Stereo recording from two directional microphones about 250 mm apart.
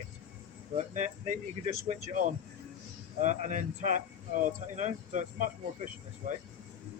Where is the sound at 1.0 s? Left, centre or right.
Right.